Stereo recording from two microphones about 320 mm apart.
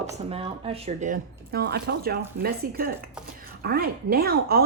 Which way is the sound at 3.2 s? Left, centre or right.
Centre.